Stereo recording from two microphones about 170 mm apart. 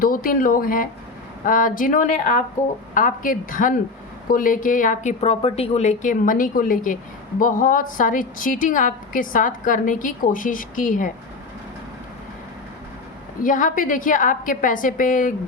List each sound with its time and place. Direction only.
0.0 s a woman's voice: 55° left (ahead or behind)
5.2 s a woman's voice: 35° left (ahead or behind); by 11.1 s 50° left (ahead or behind)
13.4 s a woman's voice: 50° left (ahead or behind)